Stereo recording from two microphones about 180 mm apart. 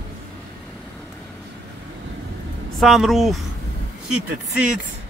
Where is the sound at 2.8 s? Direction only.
Centre (ahead or behind).